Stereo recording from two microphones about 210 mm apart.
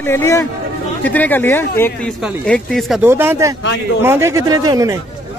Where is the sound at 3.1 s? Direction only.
10° right (ahead or behind).